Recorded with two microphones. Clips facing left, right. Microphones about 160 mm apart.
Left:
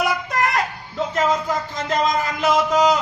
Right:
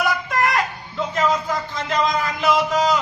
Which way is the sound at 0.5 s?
45° left (ahead or behind).